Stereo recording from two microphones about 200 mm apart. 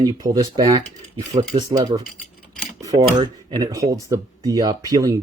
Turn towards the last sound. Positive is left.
turn(degrees=-20)  # may be behind; listen again after turning